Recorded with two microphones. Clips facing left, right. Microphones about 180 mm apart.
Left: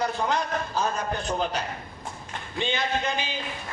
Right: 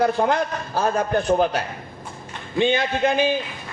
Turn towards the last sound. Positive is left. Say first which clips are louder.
# right 9 dB
turn(degrees=-55)  # may be behind; listen again after turning